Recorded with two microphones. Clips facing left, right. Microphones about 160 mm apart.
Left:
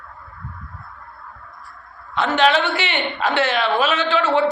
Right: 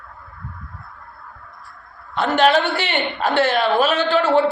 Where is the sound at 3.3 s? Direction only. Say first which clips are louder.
Right 2 dB; 5° right (ahead or behind).